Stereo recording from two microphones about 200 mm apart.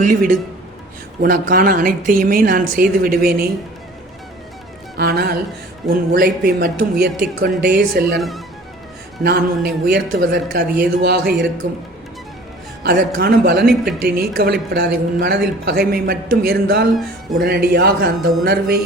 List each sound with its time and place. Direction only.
0.0 s a woman's voice: 40° right (ahead or behind)
4.9 s a woman's voice: 55° right (ahead or behind)
9.2 s a woman's voice: 50° right (ahead or behind)
12.8 s a woman's voice: 50° right (ahead or behind)